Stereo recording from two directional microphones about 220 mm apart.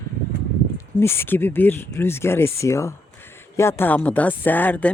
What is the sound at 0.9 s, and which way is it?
Speech, 10° left (ahead or behind).